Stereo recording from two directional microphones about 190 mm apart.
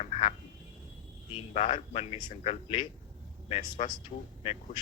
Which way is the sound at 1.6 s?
35° left (ahead or behind).